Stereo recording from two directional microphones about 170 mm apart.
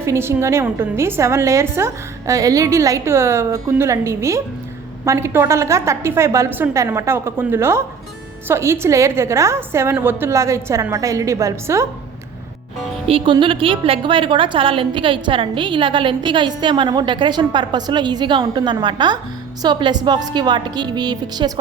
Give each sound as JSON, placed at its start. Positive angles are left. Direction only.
{"t": 0.0, "sound": "a woman's voice", "side_deg": -15}
{"t": 13.1, "sound": "a woman's voice", "side_deg": -30}